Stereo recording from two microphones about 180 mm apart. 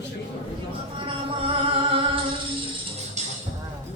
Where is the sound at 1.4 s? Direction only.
30° right (ahead or behind).